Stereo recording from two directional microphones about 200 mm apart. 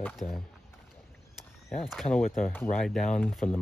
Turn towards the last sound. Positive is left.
turn(degrees=5)  # may be behind; listen again after turning